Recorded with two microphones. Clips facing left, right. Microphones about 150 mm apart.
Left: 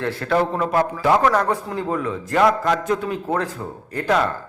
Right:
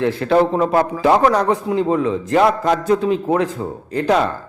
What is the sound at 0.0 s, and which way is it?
A man's voice, 20° right (ahead or behind).